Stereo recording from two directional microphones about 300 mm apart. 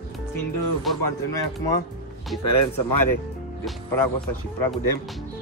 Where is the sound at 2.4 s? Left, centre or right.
Left.